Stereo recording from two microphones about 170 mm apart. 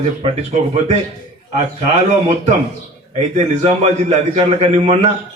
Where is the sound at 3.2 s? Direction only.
40° right (ahead or behind).